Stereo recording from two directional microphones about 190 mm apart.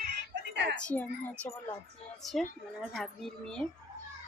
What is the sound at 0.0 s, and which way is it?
Chicken, 65° right (ahead or behind).